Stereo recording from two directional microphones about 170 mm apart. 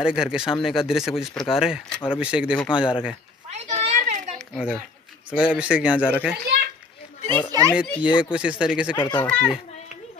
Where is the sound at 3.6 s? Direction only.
40° right (ahead or behind).